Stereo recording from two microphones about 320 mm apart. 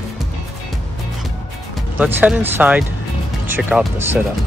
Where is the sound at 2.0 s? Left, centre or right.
Centre.